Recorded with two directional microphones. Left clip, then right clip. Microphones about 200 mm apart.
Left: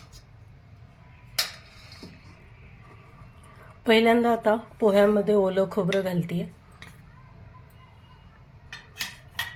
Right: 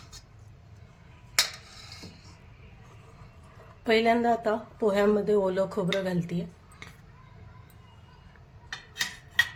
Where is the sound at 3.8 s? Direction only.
10° left (ahead or behind).